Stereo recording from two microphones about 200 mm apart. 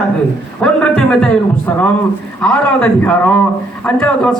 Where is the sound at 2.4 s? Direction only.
5° left (ahead or behind).